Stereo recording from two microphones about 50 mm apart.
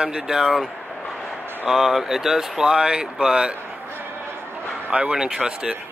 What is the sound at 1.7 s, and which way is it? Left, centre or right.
Speech, centre.